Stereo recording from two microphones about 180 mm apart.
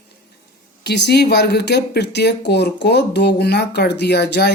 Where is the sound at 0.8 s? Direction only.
65° left (ahead or behind).